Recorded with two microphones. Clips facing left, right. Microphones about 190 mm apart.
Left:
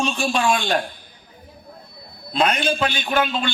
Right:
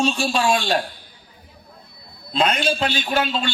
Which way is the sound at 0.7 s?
50° left (ahead or behind).